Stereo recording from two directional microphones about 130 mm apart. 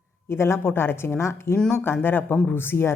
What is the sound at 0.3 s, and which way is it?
Speech, 20° left (ahead or behind).